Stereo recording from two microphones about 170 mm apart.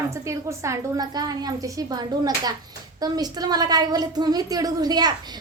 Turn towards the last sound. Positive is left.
turn(degrees=-25)  # may be behind; listen again after turning